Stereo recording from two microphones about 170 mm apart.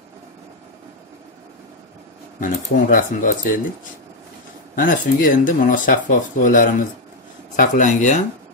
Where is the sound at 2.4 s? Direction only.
55° left (ahead or behind).